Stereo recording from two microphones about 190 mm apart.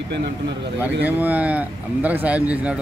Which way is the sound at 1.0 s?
10° right (ahead or behind).